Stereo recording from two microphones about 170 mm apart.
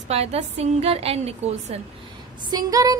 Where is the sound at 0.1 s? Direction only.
40° right (ahead or behind).